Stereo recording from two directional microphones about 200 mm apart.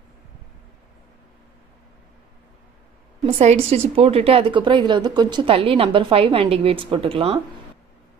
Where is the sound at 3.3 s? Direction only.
30° right (ahead or behind).